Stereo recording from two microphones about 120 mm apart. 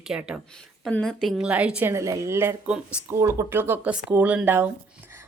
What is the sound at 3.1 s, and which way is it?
Speech, 25° right (ahead or behind).